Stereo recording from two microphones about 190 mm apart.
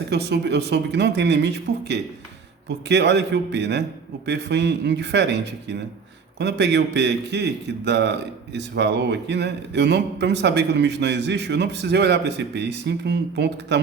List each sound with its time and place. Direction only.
0.1 s a man's voice: 60° right (ahead or behind)